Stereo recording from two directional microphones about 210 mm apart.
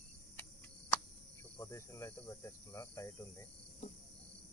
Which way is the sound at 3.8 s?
30° left (ahead or behind).